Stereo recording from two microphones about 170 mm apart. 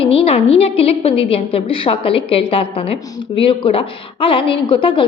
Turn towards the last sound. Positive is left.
turn(degrees=30)  # may be behind; listen again after turning